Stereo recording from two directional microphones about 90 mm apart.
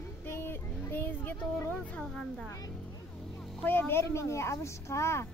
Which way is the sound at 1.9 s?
5° left (ahead or behind).